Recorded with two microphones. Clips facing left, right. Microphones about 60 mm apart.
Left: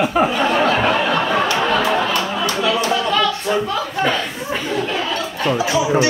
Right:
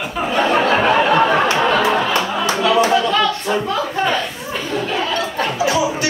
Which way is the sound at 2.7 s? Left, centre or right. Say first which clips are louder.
Right 6 dB; right.